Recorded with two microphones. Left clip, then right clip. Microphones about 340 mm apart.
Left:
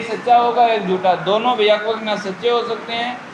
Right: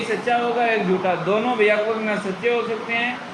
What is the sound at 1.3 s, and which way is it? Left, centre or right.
Speech, left.